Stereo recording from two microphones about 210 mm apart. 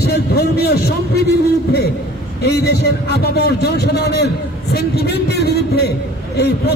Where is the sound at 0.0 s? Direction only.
50° left (ahead or behind).